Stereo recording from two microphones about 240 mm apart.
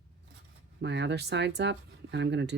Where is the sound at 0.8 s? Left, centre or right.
Right.